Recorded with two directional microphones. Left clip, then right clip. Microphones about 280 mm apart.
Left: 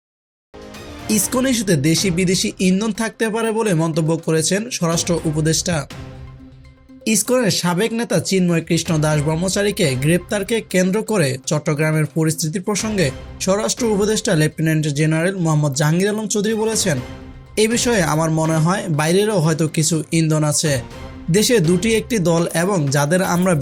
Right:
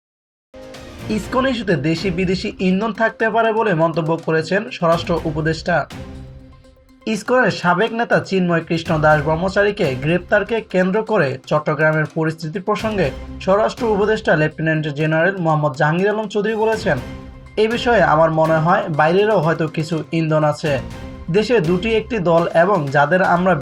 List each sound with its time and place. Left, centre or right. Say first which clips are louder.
1.3 s speech: right 3 dB; left
7.0 s speech: right 2 dB; left